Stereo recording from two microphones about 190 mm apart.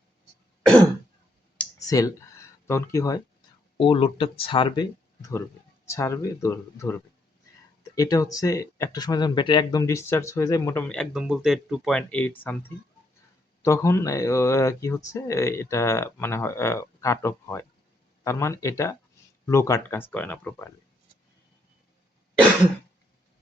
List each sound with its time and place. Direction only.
1.9 s speech: 20° left (ahead or behind)
3.8 s speech: 25° left (ahead or behind); by 20.7 s 10° left (ahead or behind)